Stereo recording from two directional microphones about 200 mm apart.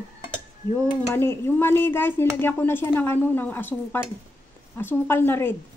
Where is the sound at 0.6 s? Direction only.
10° left (ahead or behind).